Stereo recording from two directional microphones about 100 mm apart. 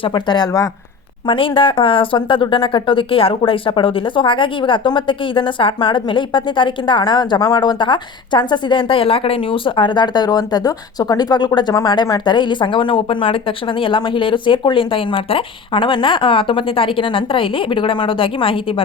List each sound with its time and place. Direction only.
0.0 s speech: 50° left (ahead or behind)
1.3 s speech: 60° left (ahead or behind)